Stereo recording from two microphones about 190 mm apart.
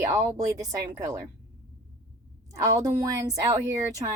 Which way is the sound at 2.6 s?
20° right (ahead or behind).